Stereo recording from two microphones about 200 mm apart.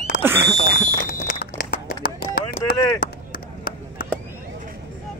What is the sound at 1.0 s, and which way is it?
Run, 50° left (ahead or behind).